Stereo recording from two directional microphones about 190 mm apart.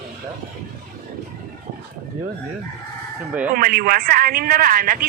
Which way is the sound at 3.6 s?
50° right (ahead or behind).